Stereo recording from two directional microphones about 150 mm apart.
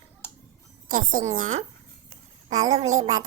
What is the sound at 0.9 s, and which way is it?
Speech, 65° right (ahead or behind).